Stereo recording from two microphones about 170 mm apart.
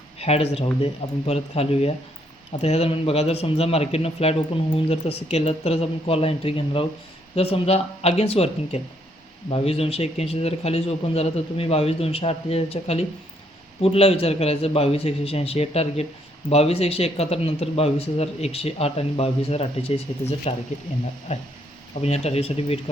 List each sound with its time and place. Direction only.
0.2 s speech: 35° left (ahead or behind)